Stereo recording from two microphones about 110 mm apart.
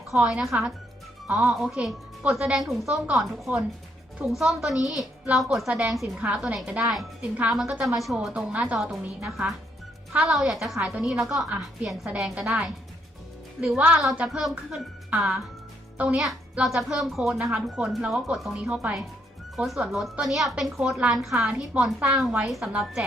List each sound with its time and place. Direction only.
0.1 s a child's voice: 5° right (ahead or behind)
16.2 s a child's voice: centre (ahead or behind)